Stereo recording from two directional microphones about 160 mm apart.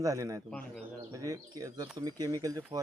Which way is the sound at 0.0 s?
20° right (ahead or behind).